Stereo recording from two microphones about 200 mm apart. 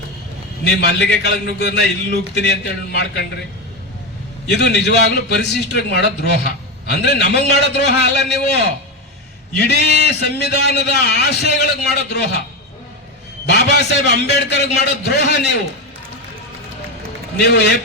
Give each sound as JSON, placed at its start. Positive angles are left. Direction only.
{"t": 0.6, "sound": "a man's voice", "side_deg": 55}
{"t": 4.4, "sound": "a man's voice", "side_deg": 55}
{"t": 9.6, "sound": "a man's voice", "side_deg": 55}
{"t": 13.5, "sound": "a man's voice", "side_deg": 55}
{"t": 17.4, "sound": "a man's voice", "side_deg": 55}